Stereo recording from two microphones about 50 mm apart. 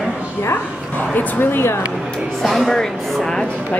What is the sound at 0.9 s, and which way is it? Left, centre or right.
Speech, left.